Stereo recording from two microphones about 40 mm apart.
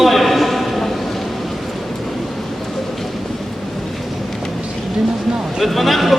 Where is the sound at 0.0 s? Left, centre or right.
Centre.